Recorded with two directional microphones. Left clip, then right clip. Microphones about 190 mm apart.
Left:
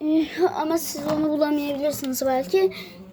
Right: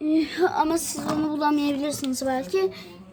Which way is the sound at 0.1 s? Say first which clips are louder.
Left 1 dB; 10° right (ahead or behind).